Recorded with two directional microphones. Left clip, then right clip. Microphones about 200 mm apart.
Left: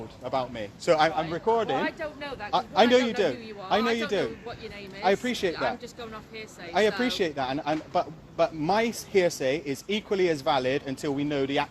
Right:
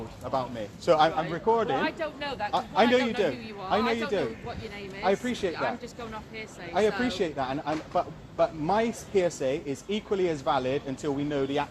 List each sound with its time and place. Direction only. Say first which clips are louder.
0.3 s speech: left 1 dB; 35° left (ahead or behind)
0.9 s speech: even; 20° left (ahead or behind)
2.5 s a man's voice: left 3 dB; 40° left (ahead or behind)
5.5 s speech: left 1 dB; 30° left (ahead or behind)
6.9 s a man's voice: left 2 dB; 45° left (ahead or behind)